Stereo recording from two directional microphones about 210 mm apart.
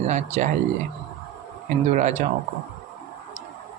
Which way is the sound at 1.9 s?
35° right (ahead or behind).